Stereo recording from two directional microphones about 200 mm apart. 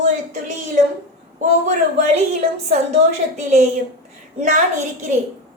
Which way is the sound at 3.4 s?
35° right (ahead or behind).